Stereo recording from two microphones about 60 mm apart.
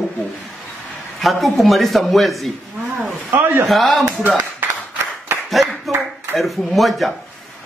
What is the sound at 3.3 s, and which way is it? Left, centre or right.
Speech, right.